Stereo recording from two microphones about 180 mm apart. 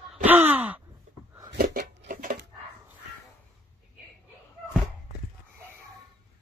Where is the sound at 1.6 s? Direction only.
55° right (ahead or behind).